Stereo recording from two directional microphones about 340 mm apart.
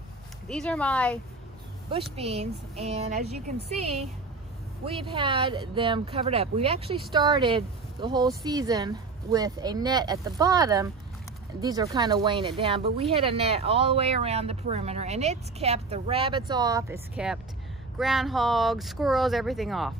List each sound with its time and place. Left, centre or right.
0.5 s speech: centre
2.1 s speech: centre